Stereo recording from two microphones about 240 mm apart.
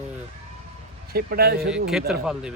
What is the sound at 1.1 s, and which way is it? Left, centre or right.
Speech, right.